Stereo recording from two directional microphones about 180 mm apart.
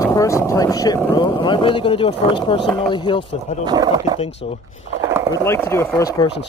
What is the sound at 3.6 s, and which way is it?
Speech, 20° right (ahead or behind).